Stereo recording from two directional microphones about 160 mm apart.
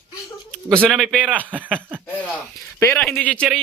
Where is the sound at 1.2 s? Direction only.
10° right (ahead or behind).